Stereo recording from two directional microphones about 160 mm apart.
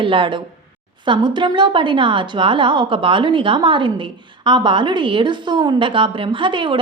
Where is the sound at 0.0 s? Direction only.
30° right (ahead or behind).